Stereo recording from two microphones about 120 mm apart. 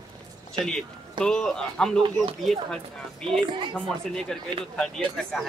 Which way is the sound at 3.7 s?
10° left (ahead or behind).